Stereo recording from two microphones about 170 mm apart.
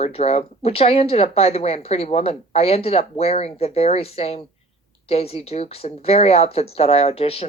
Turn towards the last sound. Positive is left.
turn(degrees=35)  # may be behind; listen again after turning